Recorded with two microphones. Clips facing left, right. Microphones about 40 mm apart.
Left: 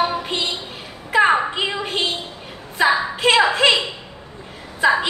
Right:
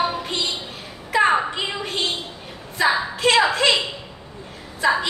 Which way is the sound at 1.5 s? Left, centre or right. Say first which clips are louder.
Left 3 dB; left.